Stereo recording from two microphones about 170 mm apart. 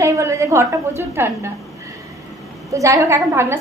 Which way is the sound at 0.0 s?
15° right (ahead or behind).